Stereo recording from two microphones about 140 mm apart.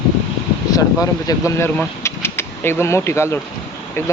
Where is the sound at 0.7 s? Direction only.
25° left (ahead or behind).